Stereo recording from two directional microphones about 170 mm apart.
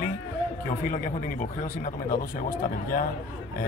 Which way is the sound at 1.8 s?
55° left (ahead or behind).